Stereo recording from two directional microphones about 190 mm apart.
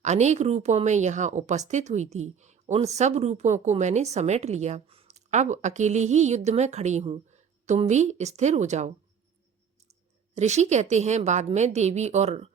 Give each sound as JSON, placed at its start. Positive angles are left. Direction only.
{"t": 0.0, "sound": "speech", "side_deg": -35}
{"t": 10.3, "sound": "speech", "side_deg": -35}